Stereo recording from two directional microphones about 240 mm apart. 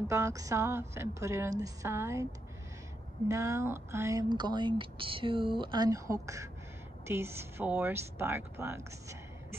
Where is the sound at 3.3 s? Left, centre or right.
Centre.